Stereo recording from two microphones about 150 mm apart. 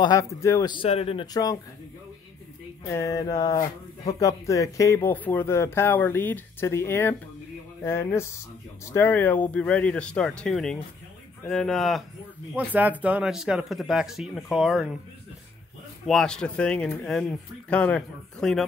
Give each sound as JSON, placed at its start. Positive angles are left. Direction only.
{"t": 0.0, "sound": "speech", "side_deg": 25}
{"t": 0.7, "sound": "speech", "side_deg": 40}
{"t": 1.2, "sound": "speech", "side_deg": 25}
{"t": 2.9, "sound": "speech", "side_deg": 20}
{"t": 12.5, "sound": "speech", "side_deg": -10}
{"t": 16.1, "sound": "speech", "side_deg": 5}